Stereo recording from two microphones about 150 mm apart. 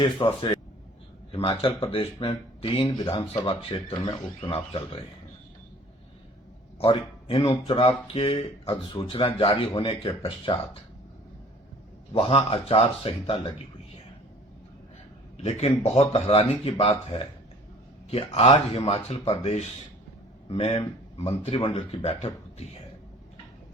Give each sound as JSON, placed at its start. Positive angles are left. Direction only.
{"t": 0.0, "sound": "speech", "side_deg": 40}
{"t": 6.7, "sound": "a sound", "side_deg": 40}
{"t": 7.3, "sound": "speech", "side_deg": 35}
{"t": 12.1, "sound": "speech", "side_deg": 40}
{"t": 15.4, "sound": "speech", "side_deg": 45}